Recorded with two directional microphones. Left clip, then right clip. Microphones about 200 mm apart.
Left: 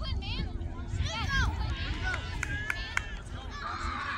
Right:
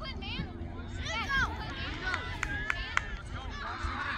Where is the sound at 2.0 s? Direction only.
45° left (ahead or behind).